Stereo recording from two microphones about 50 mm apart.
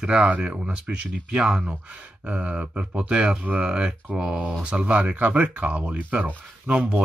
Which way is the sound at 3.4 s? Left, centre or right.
Right.